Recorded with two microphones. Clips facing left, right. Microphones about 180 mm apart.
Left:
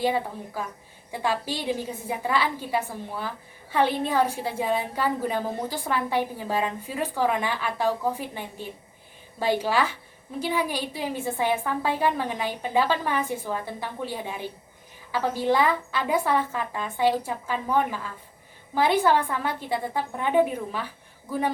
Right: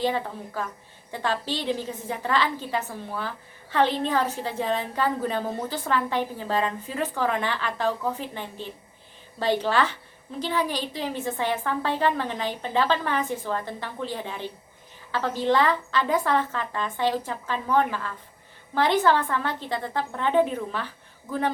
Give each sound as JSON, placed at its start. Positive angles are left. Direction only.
{"t": 0.0, "sound": "a woman's voice", "side_deg": 10}